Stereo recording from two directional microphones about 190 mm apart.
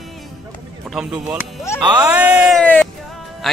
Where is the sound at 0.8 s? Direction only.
5° right (ahead or behind).